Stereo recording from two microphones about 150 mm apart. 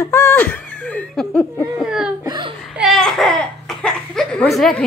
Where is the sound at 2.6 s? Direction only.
Centre (ahead or behind).